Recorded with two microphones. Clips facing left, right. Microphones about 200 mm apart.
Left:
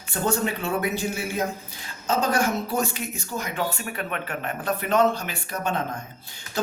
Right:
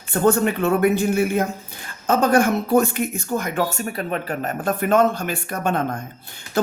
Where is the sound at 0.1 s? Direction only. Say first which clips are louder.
Right 7 dB; 55° right (ahead or behind).